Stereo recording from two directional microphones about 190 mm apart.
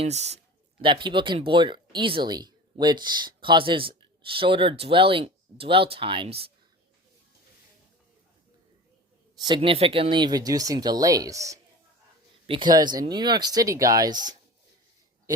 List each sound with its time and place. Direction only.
0.0 s speech: 35° right (ahead or behind)
9.4 s speech: 25° right (ahead or behind)